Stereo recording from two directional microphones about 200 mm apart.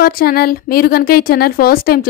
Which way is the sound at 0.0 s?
50° left (ahead or behind).